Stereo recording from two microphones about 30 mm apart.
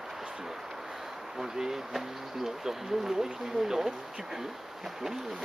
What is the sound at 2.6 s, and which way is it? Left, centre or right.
Speech, centre.